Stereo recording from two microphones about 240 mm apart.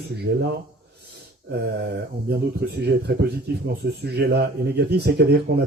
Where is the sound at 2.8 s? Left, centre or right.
Right.